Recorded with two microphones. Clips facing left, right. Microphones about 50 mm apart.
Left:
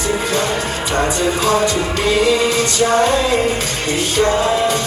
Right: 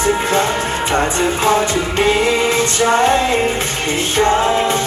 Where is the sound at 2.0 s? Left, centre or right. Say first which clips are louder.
Even; right.